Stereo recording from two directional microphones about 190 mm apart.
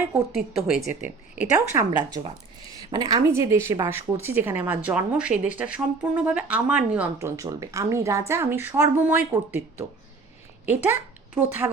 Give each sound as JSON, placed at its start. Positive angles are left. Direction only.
{"t": 0.3, "sound": "a woman's voice", "side_deg": 0}
{"t": 1.5, "sound": "a woman's voice", "side_deg": -20}